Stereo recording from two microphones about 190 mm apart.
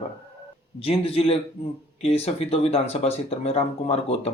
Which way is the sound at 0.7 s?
30° left (ahead or behind).